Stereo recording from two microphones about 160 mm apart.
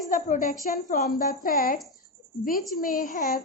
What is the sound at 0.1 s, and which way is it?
Speech, 55° left (ahead or behind).